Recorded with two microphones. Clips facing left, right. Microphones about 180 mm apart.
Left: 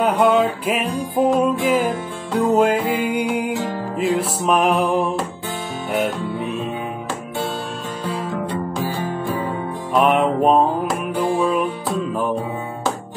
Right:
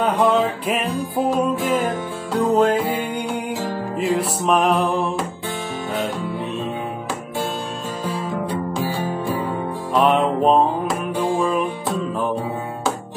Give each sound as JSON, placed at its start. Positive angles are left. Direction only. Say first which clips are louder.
{"t": 0.0, "sound": "music", "louder": "left 2 dB", "side_deg": 5}
{"t": 4.0, "sound": "music", "louder": "left 1 dB", "side_deg": 0}
{"t": 9.9, "sound": "music", "louder": "left 1 dB", "side_deg": 5}